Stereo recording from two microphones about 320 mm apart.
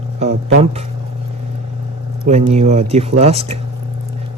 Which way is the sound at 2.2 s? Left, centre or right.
Right.